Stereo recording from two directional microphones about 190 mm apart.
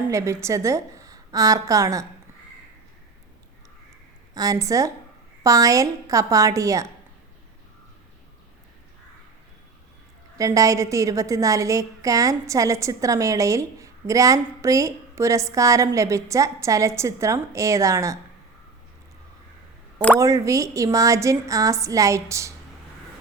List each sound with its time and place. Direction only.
0.1 s a woman's voice: 15° right (ahead or behind)
4.4 s a woman's voice: 20° right (ahead or behind)
10.3 s a woman's voice: 15° right (ahead or behind)
20.1 s a woman's voice: 15° right (ahead or behind)